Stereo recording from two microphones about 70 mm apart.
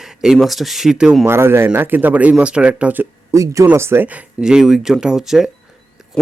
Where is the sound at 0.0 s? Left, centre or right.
Centre.